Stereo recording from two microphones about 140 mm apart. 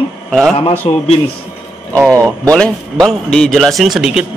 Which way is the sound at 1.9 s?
25° right (ahead or behind).